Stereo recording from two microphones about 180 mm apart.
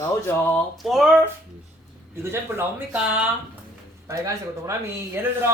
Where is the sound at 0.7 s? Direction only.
Centre (ahead or behind).